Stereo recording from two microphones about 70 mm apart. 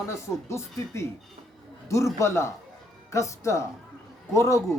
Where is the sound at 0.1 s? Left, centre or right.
Left.